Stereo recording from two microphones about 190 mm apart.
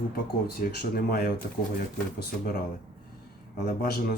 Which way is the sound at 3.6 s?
55° left (ahead or behind).